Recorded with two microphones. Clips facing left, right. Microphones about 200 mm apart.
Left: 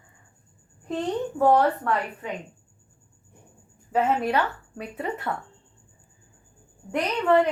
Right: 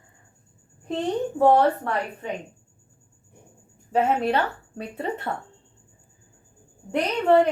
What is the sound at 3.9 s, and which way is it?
A woman's voice, 30° right (ahead or behind).